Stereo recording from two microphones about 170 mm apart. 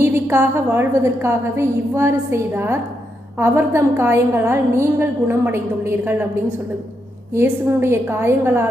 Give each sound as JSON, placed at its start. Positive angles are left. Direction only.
{"t": 0.0, "sound": "a woman's voice", "side_deg": -15}